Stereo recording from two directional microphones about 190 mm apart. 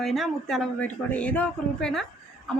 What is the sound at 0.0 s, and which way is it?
A woman's voice, centre (ahead or behind).